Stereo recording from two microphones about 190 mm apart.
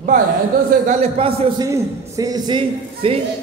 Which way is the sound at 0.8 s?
35° right (ahead or behind).